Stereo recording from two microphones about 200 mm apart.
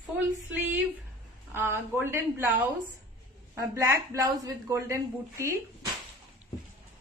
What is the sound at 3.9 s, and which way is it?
A woman's voice, 15° right (ahead or behind).